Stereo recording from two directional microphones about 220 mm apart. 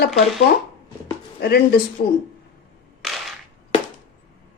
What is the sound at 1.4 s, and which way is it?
Speech, 45° left (ahead or behind).